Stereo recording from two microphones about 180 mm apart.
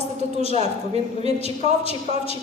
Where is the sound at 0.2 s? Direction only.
35° right (ahead or behind).